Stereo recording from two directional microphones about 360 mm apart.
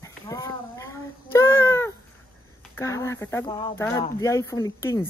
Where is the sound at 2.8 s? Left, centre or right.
Centre.